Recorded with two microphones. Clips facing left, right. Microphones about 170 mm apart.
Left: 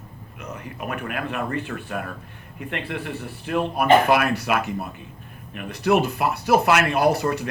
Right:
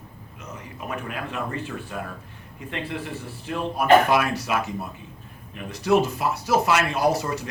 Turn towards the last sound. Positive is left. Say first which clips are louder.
# left 3 dB
turn(degrees=60)  # may be behind; listen again after turning